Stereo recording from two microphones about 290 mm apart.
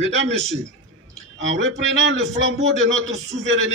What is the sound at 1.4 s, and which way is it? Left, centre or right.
A man's voice, right.